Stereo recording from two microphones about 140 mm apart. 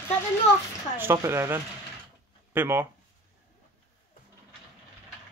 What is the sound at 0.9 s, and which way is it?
Speech, 20° right (ahead or behind).